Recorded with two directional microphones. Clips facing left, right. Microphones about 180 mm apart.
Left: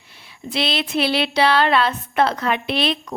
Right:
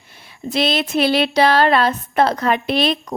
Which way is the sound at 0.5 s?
45° right (ahead or behind).